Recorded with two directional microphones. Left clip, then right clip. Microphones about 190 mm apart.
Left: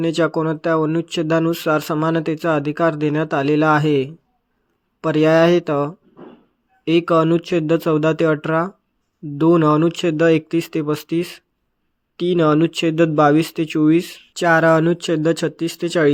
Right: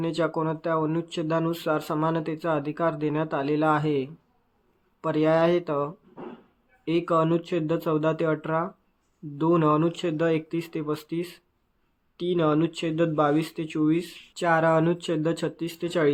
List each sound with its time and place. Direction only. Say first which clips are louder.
0.0 s speech: left 8 dB; 35° left (ahead or behind)